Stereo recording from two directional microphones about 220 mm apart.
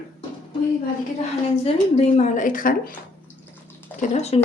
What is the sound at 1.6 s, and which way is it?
A woman's voice, 30° left (ahead or behind).